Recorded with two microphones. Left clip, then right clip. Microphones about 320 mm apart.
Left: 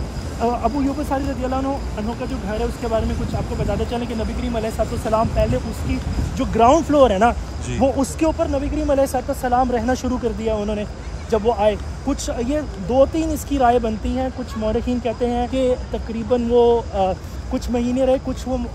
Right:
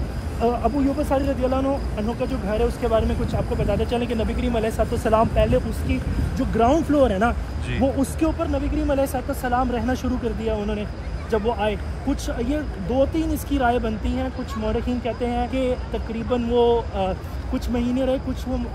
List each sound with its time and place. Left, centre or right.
0.4 s speech: centre
6.3 s speech: left